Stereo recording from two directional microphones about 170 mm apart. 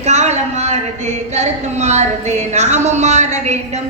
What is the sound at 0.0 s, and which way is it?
A woman's voice, 40° right (ahead or behind).